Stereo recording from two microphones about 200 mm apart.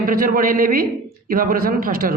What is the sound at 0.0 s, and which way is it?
A man's voice, 45° right (ahead or behind).